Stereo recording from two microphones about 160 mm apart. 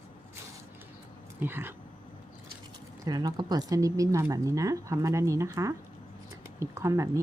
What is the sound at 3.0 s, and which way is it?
Speech, 25° right (ahead or behind).